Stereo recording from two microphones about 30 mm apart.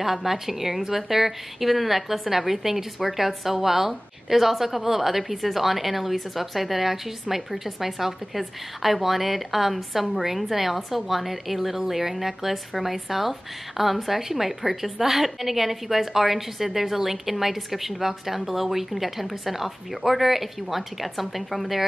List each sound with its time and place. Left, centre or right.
0.0 s speech: centre